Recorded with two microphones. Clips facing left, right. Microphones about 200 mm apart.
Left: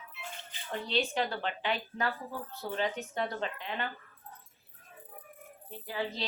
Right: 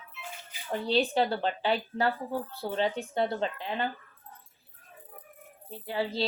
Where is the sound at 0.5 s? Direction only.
10° right (ahead or behind).